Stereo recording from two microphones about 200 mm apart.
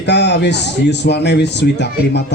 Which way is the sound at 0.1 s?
60° left (ahead or behind).